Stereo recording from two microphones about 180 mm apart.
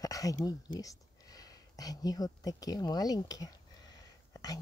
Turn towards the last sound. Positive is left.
turn(degrees=20)  # may be behind; listen again after turning